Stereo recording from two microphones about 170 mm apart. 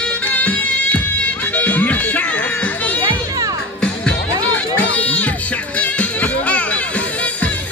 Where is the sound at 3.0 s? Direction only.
20° right (ahead or behind).